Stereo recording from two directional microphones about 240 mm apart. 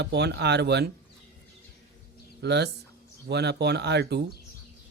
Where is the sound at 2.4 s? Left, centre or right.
Right.